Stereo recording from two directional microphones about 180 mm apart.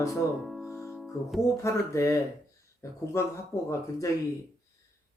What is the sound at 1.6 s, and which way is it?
A man's voice, 15° left (ahead or behind).